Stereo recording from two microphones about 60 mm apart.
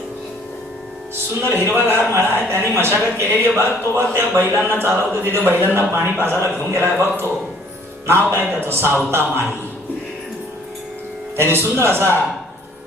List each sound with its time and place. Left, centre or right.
1.4 s a man's voice: right
11.3 s a man's voice: right